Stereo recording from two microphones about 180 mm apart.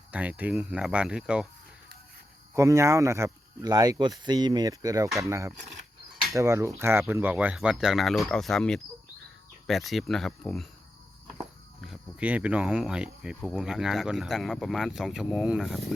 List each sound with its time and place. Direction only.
0.1 s speech: 10° right (ahead or behind)
2.6 s speech: 15° right (ahead or behind); by 10.7 s centre (ahead or behind)
11.8 s speech: 5° right (ahead or behind)